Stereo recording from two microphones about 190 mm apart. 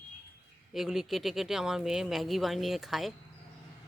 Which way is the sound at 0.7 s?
Centre (ahead or behind).